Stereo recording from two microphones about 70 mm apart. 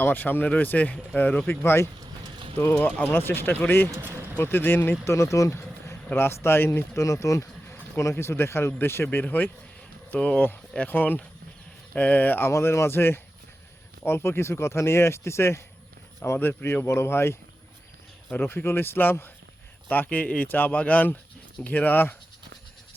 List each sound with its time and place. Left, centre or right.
0.0 s speech: left
1.5 s speech: left
12.5 s speech: left